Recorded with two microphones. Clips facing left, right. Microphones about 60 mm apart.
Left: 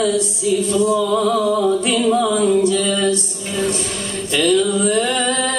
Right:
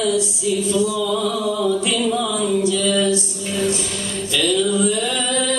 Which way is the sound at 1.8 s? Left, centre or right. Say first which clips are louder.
Left 4 dB; left.